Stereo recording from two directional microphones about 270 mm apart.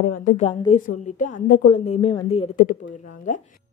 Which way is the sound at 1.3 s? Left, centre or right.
Left.